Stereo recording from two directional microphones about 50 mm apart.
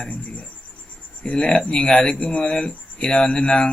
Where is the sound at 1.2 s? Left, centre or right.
Centre.